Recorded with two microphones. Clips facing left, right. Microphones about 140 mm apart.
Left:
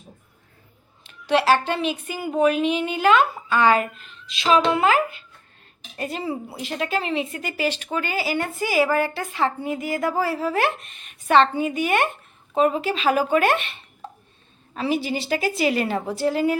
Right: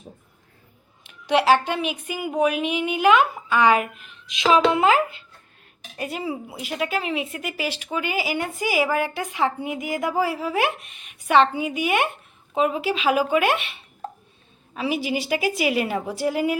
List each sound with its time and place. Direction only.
1.0 s speech: 15° right (ahead or behind)
6.0 s speech: 10° right (ahead or behind)